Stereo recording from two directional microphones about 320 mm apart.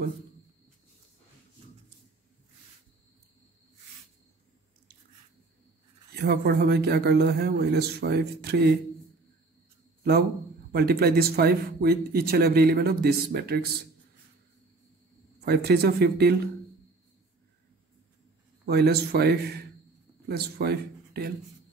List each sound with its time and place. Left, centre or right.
6.1 s a man's voice: right
10.7 s speech: right
15.4 s a man's voice: right
18.7 s a man's voice: right